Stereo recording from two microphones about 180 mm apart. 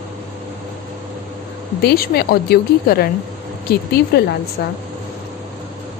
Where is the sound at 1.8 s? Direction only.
60° left (ahead or behind).